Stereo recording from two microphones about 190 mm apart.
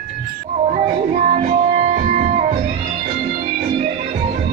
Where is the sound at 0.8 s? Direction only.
45° right (ahead or behind).